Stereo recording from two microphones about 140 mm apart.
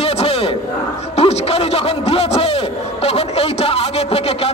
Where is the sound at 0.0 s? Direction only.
45° left (ahead or behind).